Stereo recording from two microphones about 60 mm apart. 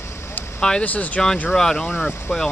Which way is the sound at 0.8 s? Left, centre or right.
Left.